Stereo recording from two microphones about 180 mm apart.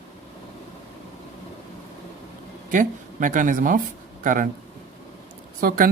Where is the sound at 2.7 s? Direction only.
45° right (ahead or behind).